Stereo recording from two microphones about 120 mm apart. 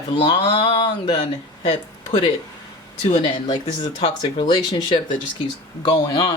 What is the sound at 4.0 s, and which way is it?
Speech, 40° left (ahead or behind).